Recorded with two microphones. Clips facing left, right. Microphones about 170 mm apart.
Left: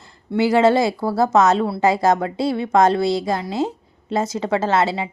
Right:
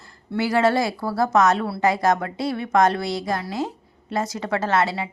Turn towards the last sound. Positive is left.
turn(degrees=25)  # may be behind; listen again after turning